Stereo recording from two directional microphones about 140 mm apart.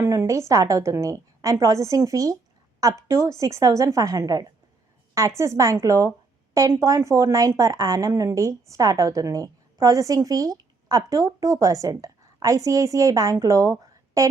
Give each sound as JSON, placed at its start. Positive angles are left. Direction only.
{"t": 0.0, "sound": "a woman's voice", "side_deg": -20}